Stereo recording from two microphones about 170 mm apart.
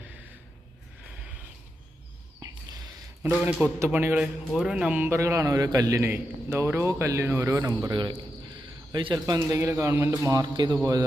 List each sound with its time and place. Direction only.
3.4 s a man's voice: 15° right (ahead or behind)